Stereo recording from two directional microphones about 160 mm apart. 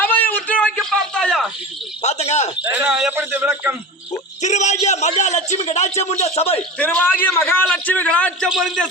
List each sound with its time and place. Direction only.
0.0 s a sound: 10° left (ahead or behind)
2.0 s a man's voice: 45° left (ahead or behind)
2.6 s speech: 10° right (ahead or behind)
4.4 s a man's voice: 45° left (ahead or behind)
6.6 s a man's voice: 10° left (ahead or behind)